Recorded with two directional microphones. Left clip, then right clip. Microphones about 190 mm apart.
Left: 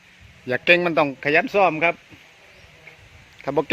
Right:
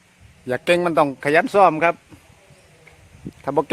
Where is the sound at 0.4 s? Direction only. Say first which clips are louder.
Left 1 dB; 10° right (ahead or behind).